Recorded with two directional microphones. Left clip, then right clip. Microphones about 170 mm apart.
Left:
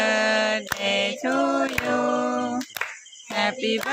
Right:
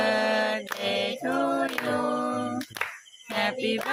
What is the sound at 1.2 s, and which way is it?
A capella, 35° left (ahead or behind).